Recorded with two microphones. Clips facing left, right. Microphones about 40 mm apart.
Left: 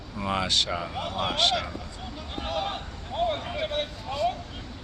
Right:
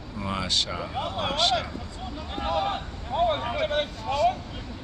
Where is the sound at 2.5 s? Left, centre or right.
Right.